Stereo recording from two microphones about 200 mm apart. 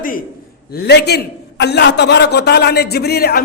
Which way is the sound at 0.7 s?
55° left (ahead or behind).